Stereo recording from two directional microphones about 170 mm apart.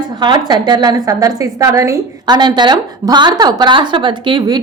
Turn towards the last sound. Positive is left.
turn(degrees=-25)  # may be behind; listen again after turning